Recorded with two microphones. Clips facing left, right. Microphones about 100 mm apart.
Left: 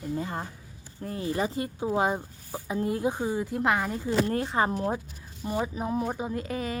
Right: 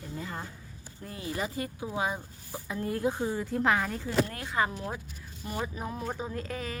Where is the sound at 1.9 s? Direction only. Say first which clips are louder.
Left 7 dB; 40° left (ahead or behind).